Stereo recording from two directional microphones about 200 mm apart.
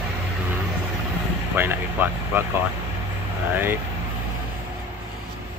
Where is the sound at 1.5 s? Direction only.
10° right (ahead or behind).